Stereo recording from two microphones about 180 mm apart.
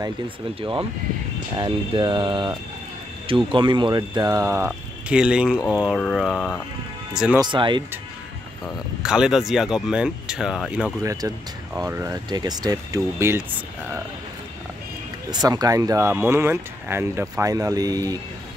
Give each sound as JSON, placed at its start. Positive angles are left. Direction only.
{"t": 0.6, "sound": "speech", "side_deg": -30}
{"t": 4.6, "sound": "speech", "side_deg": -5}
{"t": 7.3, "sound": "speech", "side_deg": -25}
{"t": 9.0, "sound": "speech", "side_deg": -5}
{"t": 11.0, "sound": "speech", "side_deg": -20}
{"t": 15.4, "sound": "speech", "side_deg": -20}